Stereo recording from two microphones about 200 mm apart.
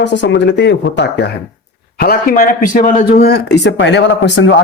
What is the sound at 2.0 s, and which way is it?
Speech, 45° left (ahead or behind).